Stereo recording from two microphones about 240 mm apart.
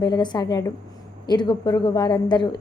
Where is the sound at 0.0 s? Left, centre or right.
Centre.